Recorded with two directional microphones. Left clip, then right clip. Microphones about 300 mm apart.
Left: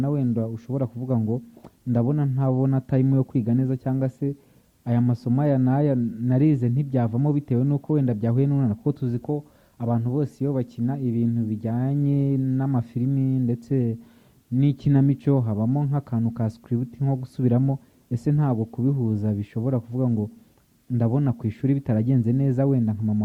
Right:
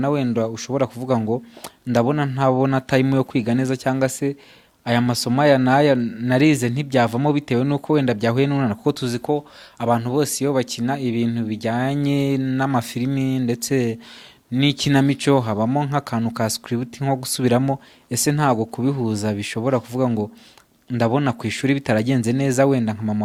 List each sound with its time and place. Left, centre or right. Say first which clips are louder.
0.0 s speech: right 6 dB; centre
0.7 s speech: right 8 dB; right
1.0 s speech: right 6 dB; centre
18.5 s speech: right 5 dB; right